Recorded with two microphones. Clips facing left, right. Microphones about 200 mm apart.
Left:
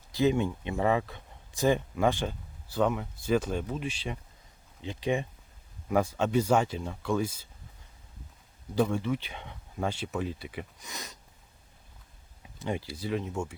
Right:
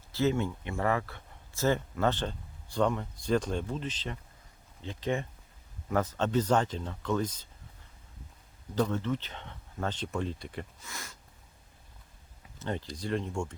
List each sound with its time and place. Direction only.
0.1 s speech: 15° left (ahead or behind)
8.7 s speech: 10° left (ahead or behind)
10.8 s speech: 20° left (ahead or behind)
12.5 s speech: 10° left (ahead or behind)